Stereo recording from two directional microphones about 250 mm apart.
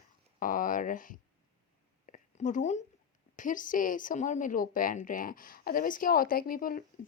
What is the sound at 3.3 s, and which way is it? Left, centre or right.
Speech, left.